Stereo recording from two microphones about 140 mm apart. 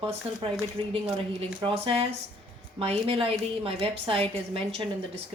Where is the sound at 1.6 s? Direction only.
40° right (ahead or behind).